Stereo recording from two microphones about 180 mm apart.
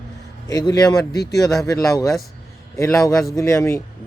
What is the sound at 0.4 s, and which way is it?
A man's voice, 20° left (ahead or behind).